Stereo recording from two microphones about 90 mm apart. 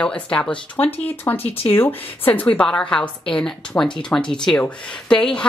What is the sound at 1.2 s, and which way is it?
A woman's voice, 25° left (ahead or behind).